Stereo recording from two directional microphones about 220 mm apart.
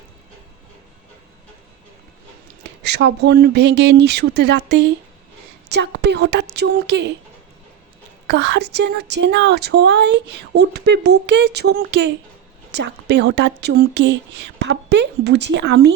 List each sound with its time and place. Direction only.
2.8 s speech: 50° right (ahead or behind)
8.3 s speech: 50° right (ahead or behind)